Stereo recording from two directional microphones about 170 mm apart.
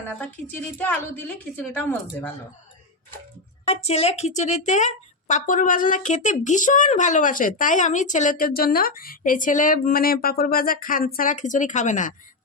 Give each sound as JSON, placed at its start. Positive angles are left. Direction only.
{"t": 0.2, "sound": "a woman's voice", "side_deg": 10}
{"t": 3.7, "sound": "a woman's voice", "side_deg": 35}